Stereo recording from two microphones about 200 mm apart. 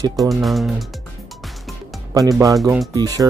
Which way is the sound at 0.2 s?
Centre (ahead or behind).